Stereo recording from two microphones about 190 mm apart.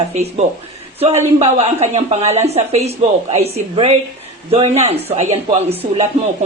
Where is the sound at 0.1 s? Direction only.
35° right (ahead or behind).